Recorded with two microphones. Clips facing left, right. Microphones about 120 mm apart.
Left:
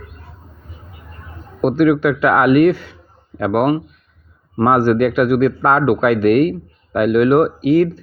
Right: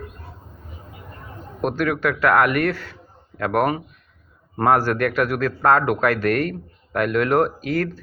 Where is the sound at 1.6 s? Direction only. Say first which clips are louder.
Left 8 dB; 15° left (ahead or behind).